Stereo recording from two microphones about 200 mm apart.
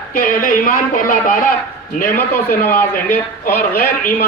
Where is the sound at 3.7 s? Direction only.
45° left (ahead or behind).